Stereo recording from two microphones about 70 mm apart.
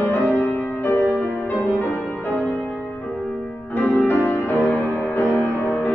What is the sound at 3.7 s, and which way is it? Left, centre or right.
Music, left.